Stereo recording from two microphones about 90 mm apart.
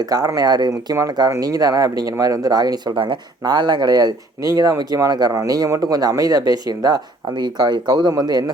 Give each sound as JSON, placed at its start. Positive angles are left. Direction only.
{"t": 0.0, "sound": "speech", "side_deg": -40}
{"t": 0.7, "sound": "speech", "side_deg": -40}
{"t": 2.9, "sound": "speech", "side_deg": -65}
{"t": 3.4, "sound": "speech", "side_deg": -55}